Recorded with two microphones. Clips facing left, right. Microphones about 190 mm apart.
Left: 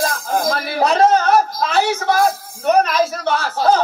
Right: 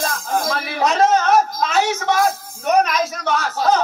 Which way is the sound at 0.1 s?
35° left (ahead or behind).